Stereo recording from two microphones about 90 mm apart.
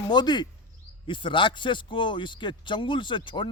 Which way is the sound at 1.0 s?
65° left (ahead or behind).